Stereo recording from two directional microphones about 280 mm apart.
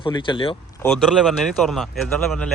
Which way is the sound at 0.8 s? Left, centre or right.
Centre.